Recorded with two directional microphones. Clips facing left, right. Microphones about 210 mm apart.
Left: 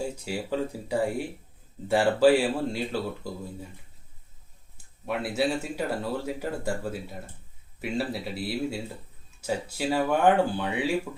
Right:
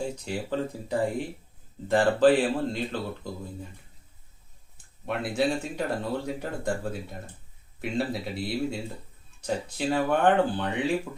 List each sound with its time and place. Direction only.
0.0 s speech: 10° left (ahead or behind)
3.2 s speech: 20° right (ahead or behind)
5.0 s speech: 5° left (ahead or behind)